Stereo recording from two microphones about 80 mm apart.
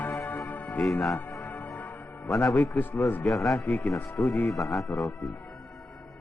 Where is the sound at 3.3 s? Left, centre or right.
Centre.